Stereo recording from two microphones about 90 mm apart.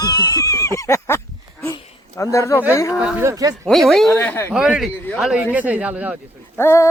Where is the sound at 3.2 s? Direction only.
40° right (ahead or behind).